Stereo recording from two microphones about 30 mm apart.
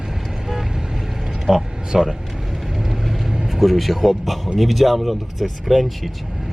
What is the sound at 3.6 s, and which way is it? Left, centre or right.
Speech, centre.